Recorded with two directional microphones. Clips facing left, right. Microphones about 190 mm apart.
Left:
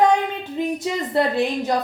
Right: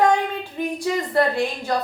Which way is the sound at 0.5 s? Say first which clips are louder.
Even; 20° left (ahead or behind).